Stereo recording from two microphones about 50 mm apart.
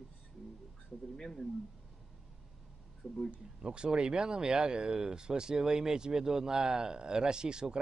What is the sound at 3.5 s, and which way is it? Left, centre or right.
Speech, centre.